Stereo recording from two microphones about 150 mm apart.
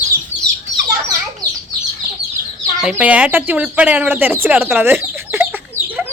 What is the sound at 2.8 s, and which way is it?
Speech, 10° right (ahead or behind).